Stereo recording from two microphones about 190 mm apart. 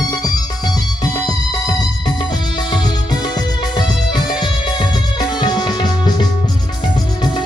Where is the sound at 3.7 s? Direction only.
25° left (ahead or behind).